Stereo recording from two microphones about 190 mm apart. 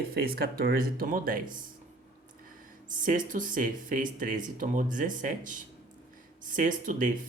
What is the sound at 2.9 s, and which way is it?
Speech, 45° right (ahead or behind).